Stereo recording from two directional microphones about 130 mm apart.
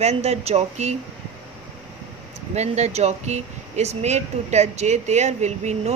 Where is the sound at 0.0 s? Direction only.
55° right (ahead or behind).